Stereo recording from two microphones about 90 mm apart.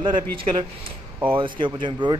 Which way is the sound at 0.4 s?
70° right (ahead or behind).